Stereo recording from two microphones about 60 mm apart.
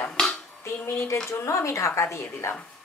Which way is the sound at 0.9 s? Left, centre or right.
Left.